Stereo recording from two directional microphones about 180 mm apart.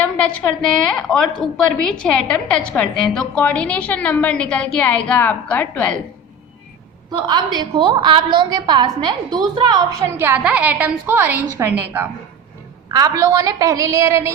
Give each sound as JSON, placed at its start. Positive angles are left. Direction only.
{"t": 0.7, "sound": "a woman's voice", "side_deg": 5}
{"t": 7.1, "sound": "a woman's voice", "side_deg": -25}
{"t": 10.1, "sound": "a woman's voice", "side_deg": -10}